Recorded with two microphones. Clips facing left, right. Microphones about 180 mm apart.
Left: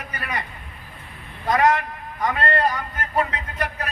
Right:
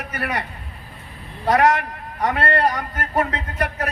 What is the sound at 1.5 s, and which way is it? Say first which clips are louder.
Speech: right 2 dB; 65° right (ahead or behind).